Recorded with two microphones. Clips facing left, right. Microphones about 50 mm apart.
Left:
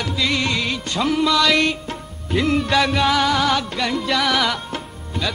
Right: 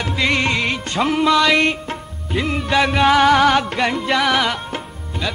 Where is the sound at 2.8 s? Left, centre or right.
Right.